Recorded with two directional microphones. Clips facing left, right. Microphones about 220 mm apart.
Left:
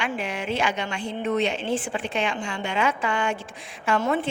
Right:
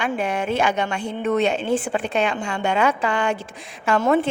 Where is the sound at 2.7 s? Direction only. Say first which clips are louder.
Right 4 dB; 40° right (ahead or behind).